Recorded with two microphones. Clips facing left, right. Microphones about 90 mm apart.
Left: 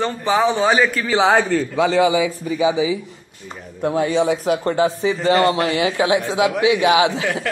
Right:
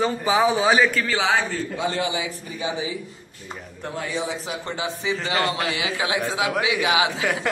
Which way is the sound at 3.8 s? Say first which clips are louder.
Left 11 dB; 65° left (ahead or behind).